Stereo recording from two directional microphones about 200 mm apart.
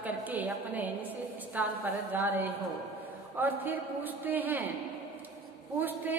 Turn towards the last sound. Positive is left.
turn(degrees=-10)  # may be behind; listen again after turning